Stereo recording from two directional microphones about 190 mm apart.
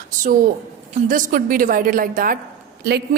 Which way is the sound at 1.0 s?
45° right (ahead or behind).